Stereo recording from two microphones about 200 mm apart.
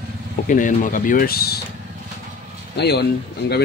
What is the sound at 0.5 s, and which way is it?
Speech, 40° left (ahead or behind).